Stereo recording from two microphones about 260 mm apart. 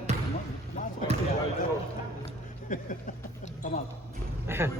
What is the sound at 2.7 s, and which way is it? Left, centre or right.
Speech, left.